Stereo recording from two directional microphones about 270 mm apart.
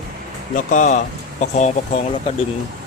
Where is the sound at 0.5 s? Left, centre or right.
Left.